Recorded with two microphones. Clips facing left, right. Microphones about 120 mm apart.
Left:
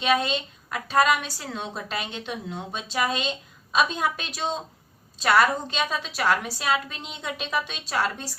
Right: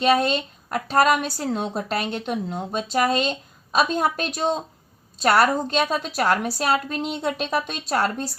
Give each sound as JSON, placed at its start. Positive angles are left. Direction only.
{"t": 0.0, "sound": "a woman's voice", "side_deg": -40}